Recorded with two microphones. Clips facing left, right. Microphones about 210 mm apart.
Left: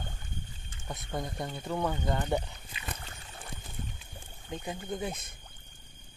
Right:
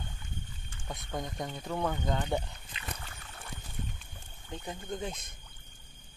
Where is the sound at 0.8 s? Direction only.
5° left (ahead or behind).